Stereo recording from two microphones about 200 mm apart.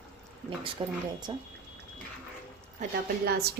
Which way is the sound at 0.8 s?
25° right (ahead or behind).